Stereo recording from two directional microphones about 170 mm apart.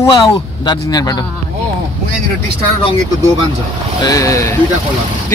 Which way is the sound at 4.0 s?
20° left (ahead or behind).